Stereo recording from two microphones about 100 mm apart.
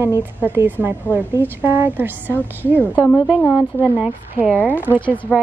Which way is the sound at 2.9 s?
15° left (ahead or behind).